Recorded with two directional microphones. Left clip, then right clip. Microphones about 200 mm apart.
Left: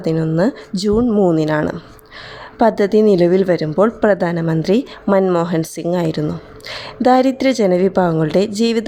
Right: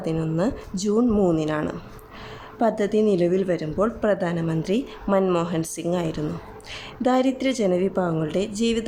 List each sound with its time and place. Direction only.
0.0 s a woman's voice: 30° left (ahead or behind)